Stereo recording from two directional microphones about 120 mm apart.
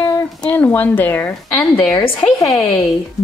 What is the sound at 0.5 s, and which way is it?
Speech, 15° left (ahead or behind).